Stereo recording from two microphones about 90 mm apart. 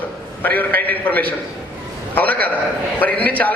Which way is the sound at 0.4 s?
20° left (ahead or behind).